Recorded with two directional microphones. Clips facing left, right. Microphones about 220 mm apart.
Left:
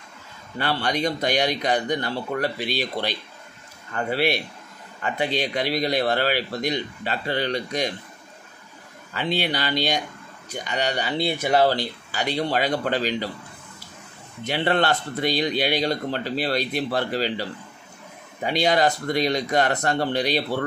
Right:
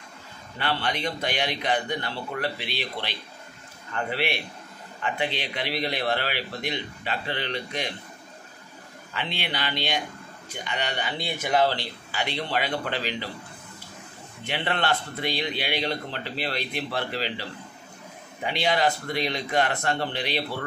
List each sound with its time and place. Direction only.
0.6 s speech: 40° left (ahead or behind)
9.1 s a man's voice: 40° left (ahead or behind)
14.4 s speech: 40° left (ahead or behind)
18.4 s speech: 40° left (ahead or behind)